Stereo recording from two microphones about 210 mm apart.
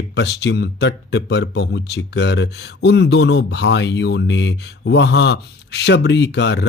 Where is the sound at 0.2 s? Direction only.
55° left (ahead or behind).